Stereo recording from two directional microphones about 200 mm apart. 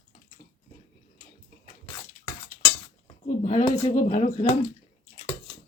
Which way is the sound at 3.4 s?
35° left (ahead or behind).